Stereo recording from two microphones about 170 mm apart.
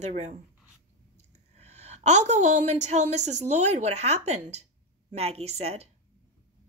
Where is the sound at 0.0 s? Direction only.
45° right (ahead or behind).